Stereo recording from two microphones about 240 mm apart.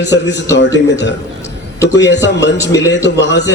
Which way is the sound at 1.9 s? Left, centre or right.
Left.